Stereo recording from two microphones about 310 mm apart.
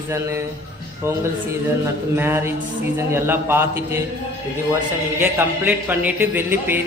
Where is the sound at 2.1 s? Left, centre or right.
Centre.